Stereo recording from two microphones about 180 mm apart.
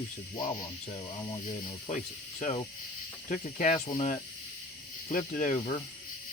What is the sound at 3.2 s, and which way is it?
Speech, 45° left (ahead or behind).